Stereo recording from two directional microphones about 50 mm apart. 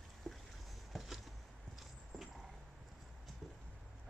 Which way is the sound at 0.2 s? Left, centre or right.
Centre.